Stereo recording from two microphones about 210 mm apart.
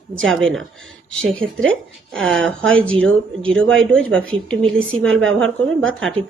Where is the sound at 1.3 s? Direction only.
65° right (ahead or behind).